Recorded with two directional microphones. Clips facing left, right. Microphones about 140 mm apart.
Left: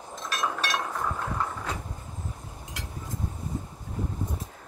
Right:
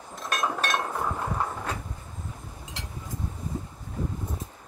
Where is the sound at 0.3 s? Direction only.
50° right (ahead or behind).